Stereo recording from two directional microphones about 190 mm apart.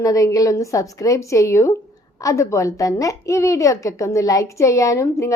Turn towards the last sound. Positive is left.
turn(degrees=15)  # may be behind; listen again after turning